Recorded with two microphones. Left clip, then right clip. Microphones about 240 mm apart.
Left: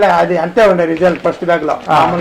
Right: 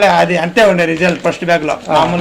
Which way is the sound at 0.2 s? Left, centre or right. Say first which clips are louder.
Even; right.